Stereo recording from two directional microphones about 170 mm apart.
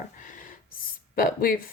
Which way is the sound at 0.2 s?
50° left (ahead or behind).